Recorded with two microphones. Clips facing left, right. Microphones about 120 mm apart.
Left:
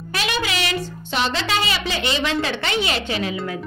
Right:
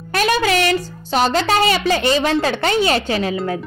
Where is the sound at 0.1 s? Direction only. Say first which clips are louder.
Right 8 dB; 45° right (ahead or behind).